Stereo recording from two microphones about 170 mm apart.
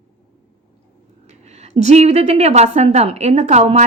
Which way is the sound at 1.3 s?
40° right (ahead or behind).